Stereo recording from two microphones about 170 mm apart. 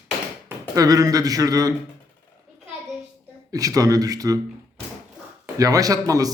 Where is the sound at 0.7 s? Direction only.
20° right (ahead or behind).